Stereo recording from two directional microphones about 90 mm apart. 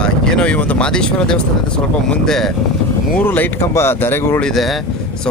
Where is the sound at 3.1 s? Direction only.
20° left (ahead or behind).